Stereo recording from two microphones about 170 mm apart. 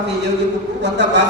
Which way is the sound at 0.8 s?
90° right.